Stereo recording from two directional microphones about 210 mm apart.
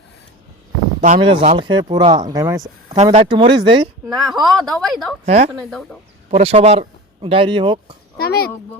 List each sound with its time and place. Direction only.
1.0 s speech: 35° right (ahead or behind); by 2.6 s 15° right (ahead or behind)
2.9 s speech: 35° right (ahead or behind)
4.1 s speech: centre (ahead or behind)
5.2 s speech: 30° right (ahead or behind)
8.2 s speech: 50° left (ahead or behind)